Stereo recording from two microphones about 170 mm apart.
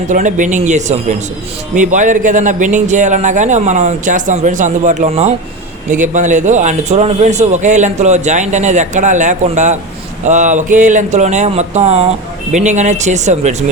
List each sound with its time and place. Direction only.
0.1 s a man's voice: 50° right (ahead or behind)